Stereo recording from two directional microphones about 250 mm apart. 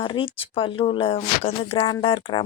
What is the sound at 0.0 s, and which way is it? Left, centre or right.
Speech, centre.